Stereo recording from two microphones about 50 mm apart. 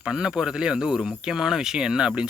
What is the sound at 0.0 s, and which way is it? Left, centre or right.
Speech, centre.